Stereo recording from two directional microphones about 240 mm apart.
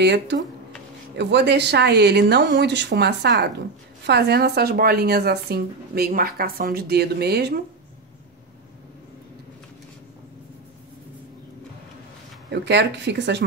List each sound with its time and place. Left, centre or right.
0.0 s speech: right
12.4 s speech: right